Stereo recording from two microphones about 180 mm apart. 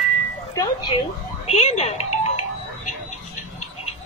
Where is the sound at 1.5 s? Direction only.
40° left (ahead or behind).